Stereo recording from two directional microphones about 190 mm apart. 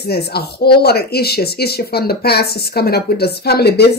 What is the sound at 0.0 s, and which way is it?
Speech, 55° left (ahead or behind).